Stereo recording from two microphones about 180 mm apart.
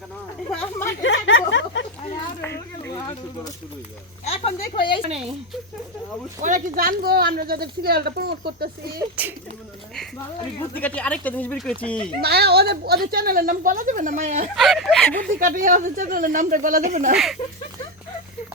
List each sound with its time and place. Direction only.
0.5 s speech: 10° left (ahead or behind)
1.0 s a sound: 90° left
2.4 s a sound: 15° left (ahead or behind)
4.3 s speech: 35° left (ahead or behind)
6.4 s speech: 50° right (ahead or behind)
9.2 s speech: 10° right (ahead or behind)
10.8 s speech: 10° left (ahead or behind)
12.2 s speech: 65° right (ahead or behind); by 14.5 s 40° right (ahead or behind)
14.5 s speech: centre (ahead or behind)
15.2 s speech: 50° right (ahead or behind)